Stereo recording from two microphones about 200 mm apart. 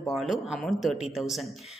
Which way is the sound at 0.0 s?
Centre (ahead or behind).